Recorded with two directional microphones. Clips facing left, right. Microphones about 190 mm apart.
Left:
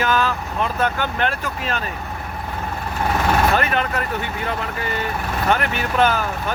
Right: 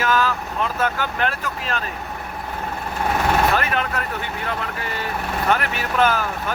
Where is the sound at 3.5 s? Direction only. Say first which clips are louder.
Left 2 dB; centre (ahead or behind).